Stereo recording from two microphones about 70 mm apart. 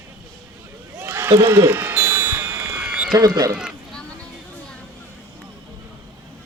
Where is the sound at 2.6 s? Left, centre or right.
Centre.